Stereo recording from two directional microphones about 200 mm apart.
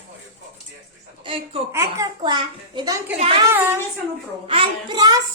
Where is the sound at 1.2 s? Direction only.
25° right (ahead or behind).